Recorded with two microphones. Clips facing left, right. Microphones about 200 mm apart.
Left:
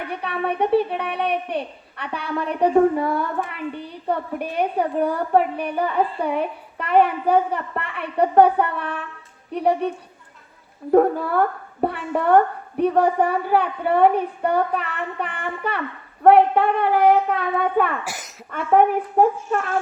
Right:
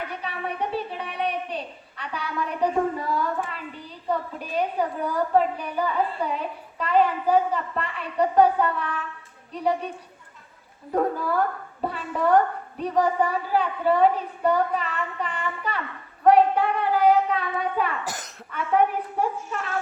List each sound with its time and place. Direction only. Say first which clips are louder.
0.1 s a woman's voice: left 7 dB; 60° left (ahead or behind)
10.9 s a woman's voice: left 7 dB; 60° left (ahead or behind)